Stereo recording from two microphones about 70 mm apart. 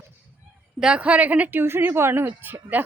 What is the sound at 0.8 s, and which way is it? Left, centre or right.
Speech, centre.